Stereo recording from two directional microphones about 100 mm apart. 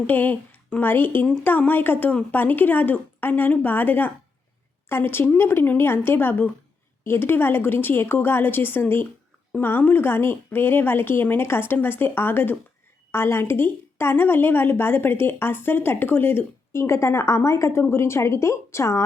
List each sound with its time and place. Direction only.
0.1 s a woman's voice: 20° left (ahead or behind)